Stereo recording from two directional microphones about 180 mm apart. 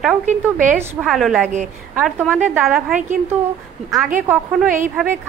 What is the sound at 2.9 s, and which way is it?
Speech, 45° right (ahead or behind).